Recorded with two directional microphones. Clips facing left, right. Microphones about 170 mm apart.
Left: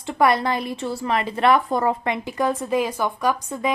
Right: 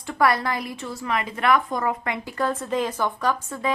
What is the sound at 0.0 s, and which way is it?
A woman's voice, 20° left (ahead or behind).